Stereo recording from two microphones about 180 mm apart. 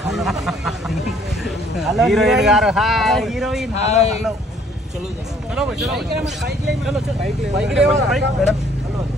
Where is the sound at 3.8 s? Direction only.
35° left (ahead or behind).